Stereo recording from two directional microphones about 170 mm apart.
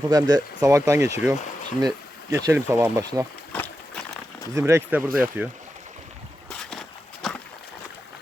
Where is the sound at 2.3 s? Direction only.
15° right (ahead or behind).